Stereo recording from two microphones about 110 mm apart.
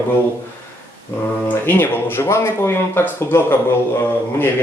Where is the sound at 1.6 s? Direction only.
20° left (ahead or behind).